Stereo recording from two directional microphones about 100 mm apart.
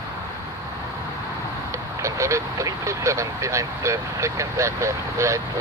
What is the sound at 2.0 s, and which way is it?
Speech, 30° right (ahead or behind).